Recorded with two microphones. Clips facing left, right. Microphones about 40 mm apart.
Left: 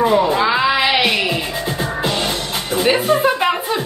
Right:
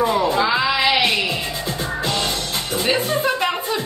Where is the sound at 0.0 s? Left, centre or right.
Left.